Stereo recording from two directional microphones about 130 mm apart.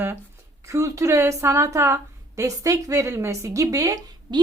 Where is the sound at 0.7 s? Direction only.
25° right (ahead or behind).